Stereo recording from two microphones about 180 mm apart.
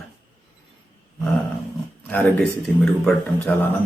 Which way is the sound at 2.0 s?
10° left (ahead or behind).